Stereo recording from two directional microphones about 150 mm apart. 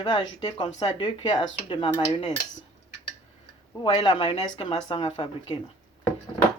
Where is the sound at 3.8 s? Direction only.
35° left (ahead or behind).